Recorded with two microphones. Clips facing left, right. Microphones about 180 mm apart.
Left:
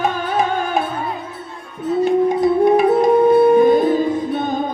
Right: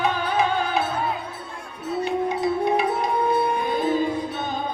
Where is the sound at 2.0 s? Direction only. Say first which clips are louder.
Left 8 dB; 50° left (ahead or behind).